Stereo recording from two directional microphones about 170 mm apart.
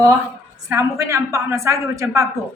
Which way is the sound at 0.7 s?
15° right (ahead or behind).